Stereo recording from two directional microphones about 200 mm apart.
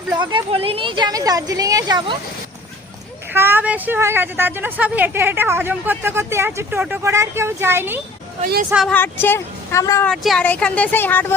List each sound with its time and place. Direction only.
0.2 s a woman's voice: 25° right (ahead or behind)
3.3 s a woman's voice: 10° right (ahead or behind)
8.9 s speech: 10° left (ahead or behind)
10.1 s speech: 5° left (ahead or behind)